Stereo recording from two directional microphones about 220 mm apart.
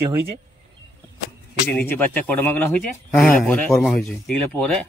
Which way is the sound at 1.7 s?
5° left (ahead or behind).